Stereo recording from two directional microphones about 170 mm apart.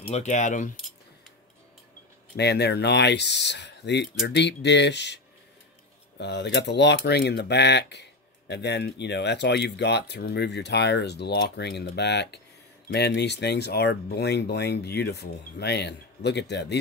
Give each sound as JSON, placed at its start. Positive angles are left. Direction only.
{"t": 0.1, "sound": "speech", "side_deg": 45}
{"t": 2.3, "sound": "speech", "side_deg": 75}